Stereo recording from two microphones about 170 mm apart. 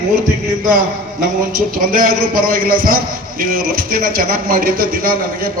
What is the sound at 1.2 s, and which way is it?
A man's voice, 55° right (ahead or behind).